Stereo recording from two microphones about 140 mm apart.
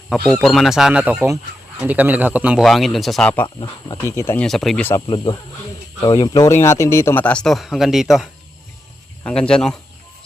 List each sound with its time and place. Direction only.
0.1 s speech: centre (ahead or behind)
3.9 s speech: 20° left (ahead or behind)
4.4 s speech: centre (ahead or behind)
5.0 s speech: 35° left (ahead or behind); by 9.7 s 5° left (ahead or behind)